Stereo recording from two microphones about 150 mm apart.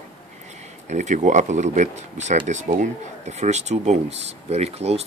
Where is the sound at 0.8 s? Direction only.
50° right (ahead or behind).